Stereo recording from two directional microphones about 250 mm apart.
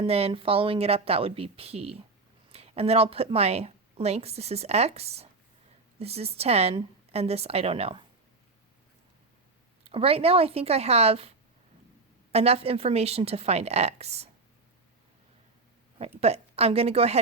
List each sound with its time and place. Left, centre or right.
0.0 s a woman's voice: right
9.8 s a woman's voice: right
12.3 s a woman's voice: right
16.2 s a woman's voice: right